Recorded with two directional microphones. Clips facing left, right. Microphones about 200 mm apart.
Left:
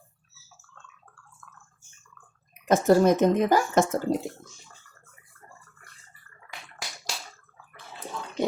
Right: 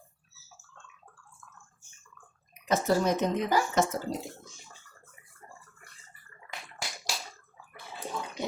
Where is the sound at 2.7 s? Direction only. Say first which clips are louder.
Left 7 dB; 50° left (ahead or behind).